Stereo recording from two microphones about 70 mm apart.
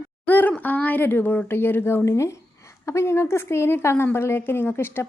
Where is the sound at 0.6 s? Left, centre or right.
Left.